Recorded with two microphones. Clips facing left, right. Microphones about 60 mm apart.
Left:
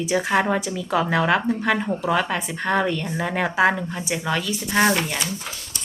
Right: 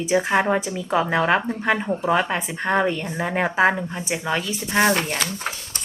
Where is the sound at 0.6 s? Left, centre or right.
Right.